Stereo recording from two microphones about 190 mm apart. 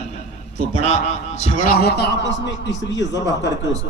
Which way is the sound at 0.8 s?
35° left (ahead or behind).